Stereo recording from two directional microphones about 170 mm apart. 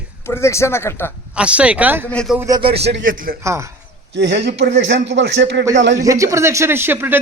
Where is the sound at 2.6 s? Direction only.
35° right (ahead or behind).